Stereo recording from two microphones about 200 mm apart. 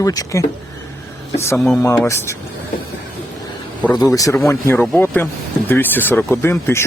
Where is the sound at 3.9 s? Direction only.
15° left (ahead or behind).